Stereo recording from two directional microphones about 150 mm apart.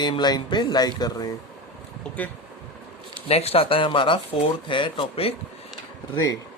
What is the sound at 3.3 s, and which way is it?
Speech, 40° left (ahead or behind).